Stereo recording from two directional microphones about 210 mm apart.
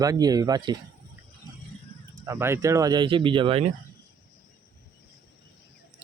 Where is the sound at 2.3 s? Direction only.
10° right (ahead or behind).